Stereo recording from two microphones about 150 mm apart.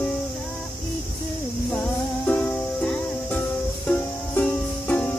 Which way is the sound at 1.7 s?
10° left (ahead or behind).